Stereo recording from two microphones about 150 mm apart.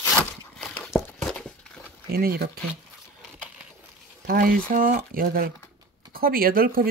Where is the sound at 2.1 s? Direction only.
90° right.